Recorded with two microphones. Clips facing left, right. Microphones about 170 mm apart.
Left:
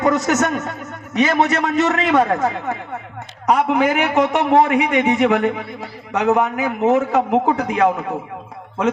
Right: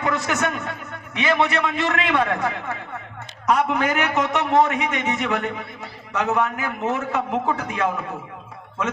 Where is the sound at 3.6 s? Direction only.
15° left (ahead or behind).